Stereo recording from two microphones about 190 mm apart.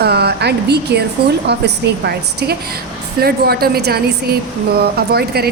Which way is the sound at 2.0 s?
60° right (ahead or behind).